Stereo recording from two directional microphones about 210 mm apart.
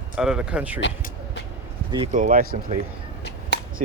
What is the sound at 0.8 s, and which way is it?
Vehicle, 60° left (ahead or behind).